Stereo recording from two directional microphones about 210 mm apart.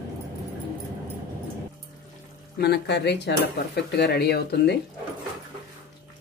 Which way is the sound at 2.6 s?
50° left (ahead or behind).